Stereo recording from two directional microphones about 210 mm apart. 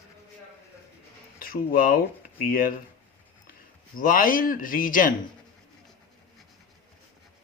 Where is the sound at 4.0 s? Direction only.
40° left (ahead or behind).